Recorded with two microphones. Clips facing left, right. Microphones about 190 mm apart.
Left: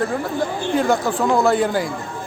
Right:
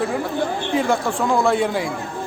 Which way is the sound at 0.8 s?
Centre (ahead or behind).